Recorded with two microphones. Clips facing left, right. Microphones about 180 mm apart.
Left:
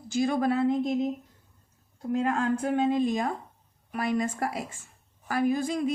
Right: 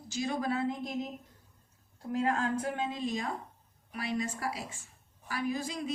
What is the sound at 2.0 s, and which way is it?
A woman's voice, 55° left (ahead or behind).